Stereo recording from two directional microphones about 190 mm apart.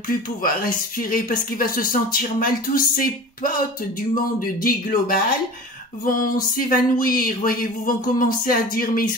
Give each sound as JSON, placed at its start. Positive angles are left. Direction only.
{"t": 0.4, "sound": "speech", "side_deg": 50}